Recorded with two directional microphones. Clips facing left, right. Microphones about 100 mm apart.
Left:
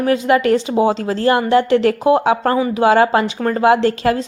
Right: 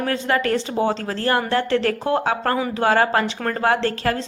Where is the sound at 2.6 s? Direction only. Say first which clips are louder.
Left 6 dB; 5° left (ahead or behind).